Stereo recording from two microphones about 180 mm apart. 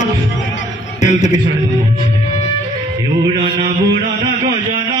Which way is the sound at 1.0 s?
40° left (ahead or behind).